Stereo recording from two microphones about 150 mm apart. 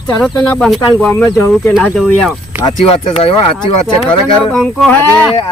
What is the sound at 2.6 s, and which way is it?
Speech, 30° left (ahead or behind).